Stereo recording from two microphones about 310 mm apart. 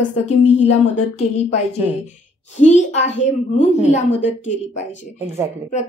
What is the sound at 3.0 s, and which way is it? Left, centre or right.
Speech, left.